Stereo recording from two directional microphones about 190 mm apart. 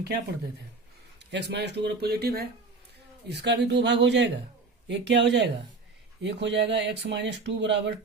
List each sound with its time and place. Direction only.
1.2 s speech: 65° right (ahead or behind)